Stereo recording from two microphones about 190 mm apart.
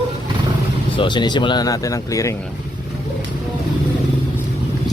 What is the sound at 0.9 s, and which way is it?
Speech, 25° left (ahead or behind).